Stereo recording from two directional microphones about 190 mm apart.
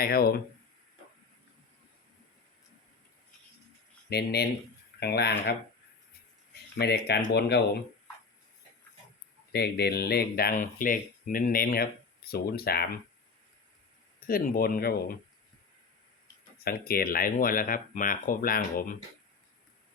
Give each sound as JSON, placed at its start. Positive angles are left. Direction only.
{"t": 0.0, "sound": "speech", "side_deg": 55}
{"t": 4.1, "sound": "speech", "side_deg": 60}
{"t": 6.7, "sound": "speech", "side_deg": 60}
{"t": 9.5, "sound": "speech", "side_deg": 60}
{"t": 14.3, "sound": "speech", "side_deg": 50}
{"t": 16.6, "sound": "speech", "side_deg": 50}